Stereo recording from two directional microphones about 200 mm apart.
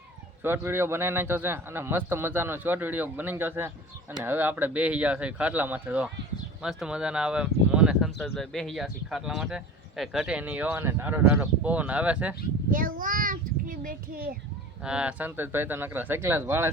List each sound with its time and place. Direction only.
0.4 s a man's voice: 10° right (ahead or behind)
12.7 s a child's voice: 45° right (ahead or behind)
14.8 s a man's voice: 5° right (ahead or behind)